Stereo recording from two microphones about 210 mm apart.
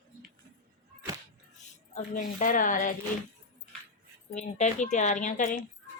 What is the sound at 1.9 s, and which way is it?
Speech, 40° left (ahead or behind).